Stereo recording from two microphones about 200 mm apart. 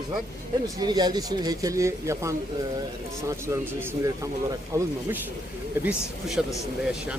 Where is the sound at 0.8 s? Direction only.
20° right (ahead or behind).